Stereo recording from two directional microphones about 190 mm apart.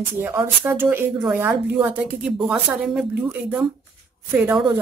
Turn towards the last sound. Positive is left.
turn(degrees=-10)  # may be behind; listen again after turning